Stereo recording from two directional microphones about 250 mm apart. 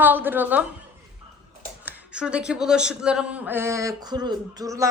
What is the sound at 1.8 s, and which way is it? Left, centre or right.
A man's voice, centre.